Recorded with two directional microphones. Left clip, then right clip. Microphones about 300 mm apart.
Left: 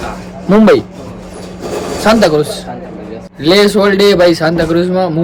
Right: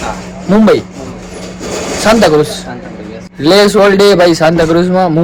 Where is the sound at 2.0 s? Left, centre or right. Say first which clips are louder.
Right 2 dB; centre.